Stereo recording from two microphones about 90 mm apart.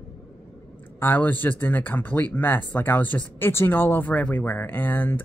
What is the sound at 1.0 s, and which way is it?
Speech, 20° left (ahead or behind).